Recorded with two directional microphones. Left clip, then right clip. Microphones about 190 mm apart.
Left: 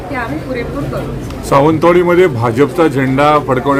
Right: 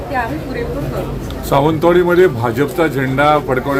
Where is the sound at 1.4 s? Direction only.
25° left (ahead or behind).